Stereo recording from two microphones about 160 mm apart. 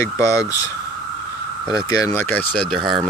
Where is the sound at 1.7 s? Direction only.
25° left (ahead or behind).